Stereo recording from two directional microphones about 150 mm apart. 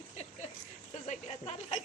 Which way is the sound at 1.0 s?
45° left (ahead or behind).